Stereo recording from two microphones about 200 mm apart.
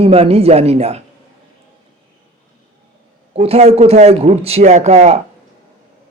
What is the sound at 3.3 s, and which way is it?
A man's voice, 30° right (ahead or behind).